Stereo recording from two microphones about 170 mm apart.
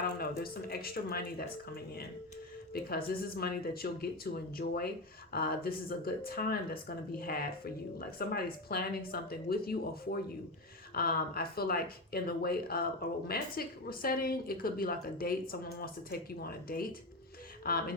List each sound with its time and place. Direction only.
0.2 s speech: 60° left (ahead or behind)